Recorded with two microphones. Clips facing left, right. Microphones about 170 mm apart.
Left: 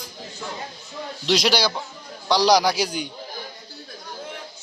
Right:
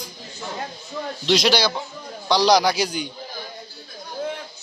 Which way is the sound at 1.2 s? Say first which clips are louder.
Right 1 dB; 10° left (ahead or behind).